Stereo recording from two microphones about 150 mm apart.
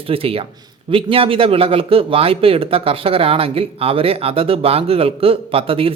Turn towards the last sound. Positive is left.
turn(degrees=-40)  # may be behind; listen again after turning